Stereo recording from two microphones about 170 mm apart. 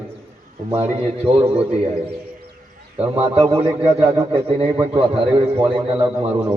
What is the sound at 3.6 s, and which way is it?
Speech, 15° right (ahead or behind).